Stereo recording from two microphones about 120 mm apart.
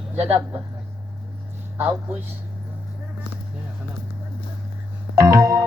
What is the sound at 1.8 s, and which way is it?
Speech, 15° right (ahead or behind).